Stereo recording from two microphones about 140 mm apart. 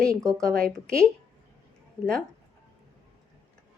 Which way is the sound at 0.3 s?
5° left (ahead or behind).